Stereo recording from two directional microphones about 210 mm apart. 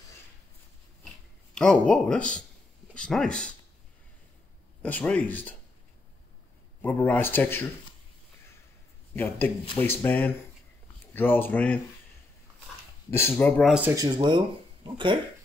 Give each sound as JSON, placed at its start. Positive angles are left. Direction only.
{"t": 1.5, "sound": "speech", "side_deg": 5}
{"t": 4.8, "sound": "speech", "side_deg": 5}
{"t": 6.8, "sound": "speech", "side_deg": 5}
{"t": 9.1, "sound": "speech", "side_deg": 10}
{"t": 13.1, "sound": "speech", "side_deg": 10}
{"t": 13.8, "sound": "speech", "side_deg": -20}